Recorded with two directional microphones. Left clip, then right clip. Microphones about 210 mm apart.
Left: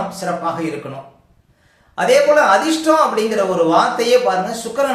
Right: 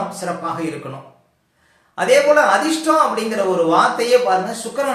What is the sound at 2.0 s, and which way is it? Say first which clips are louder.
A man's voice: left 1 dB; centre (ahead or behind).